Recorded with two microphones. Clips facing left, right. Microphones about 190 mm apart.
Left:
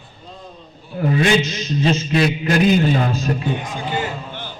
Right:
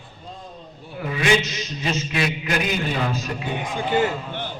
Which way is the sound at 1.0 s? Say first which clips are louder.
Left 7 dB; 40° left (ahead or behind).